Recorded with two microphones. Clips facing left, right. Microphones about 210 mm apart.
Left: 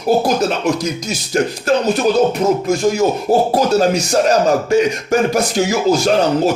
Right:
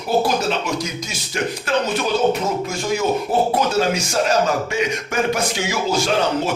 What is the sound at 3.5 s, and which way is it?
Speech, 40° left (ahead or behind).